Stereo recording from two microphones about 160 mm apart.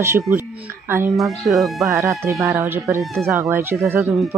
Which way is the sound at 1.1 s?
Centre (ahead or behind).